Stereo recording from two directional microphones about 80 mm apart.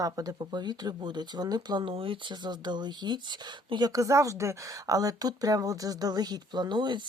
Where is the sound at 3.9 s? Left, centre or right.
Right.